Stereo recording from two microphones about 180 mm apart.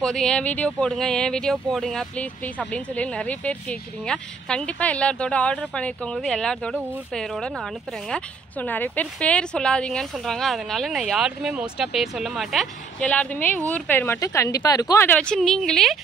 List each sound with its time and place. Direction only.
0.0 s speech: 5° left (ahead or behind)